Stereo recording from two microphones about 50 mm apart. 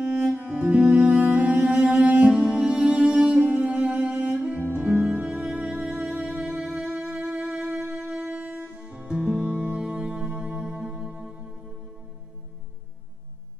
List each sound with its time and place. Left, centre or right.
0.4 s music: right
2.3 s music: centre
4.7 s music: centre